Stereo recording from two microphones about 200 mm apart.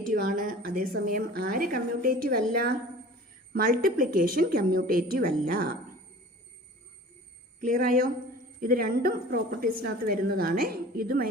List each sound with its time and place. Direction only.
0.1 s a woman's voice: 40° right (ahead or behind)
7.6 s a woman's voice: 45° right (ahead or behind)